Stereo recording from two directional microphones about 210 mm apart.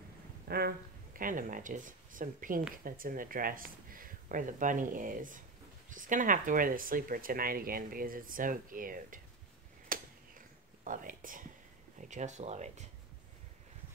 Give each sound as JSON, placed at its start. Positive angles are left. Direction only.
{"t": 0.5, "sound": "speech", "side_deg": -45}
{"t": 9.8, "sound": "whispering", "side_deg": -40}
{"t": 12.0, "sound": "speech", "side_deg": -35}